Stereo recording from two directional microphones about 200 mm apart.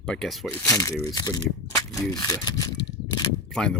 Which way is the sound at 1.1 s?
20° left (ahead or behind).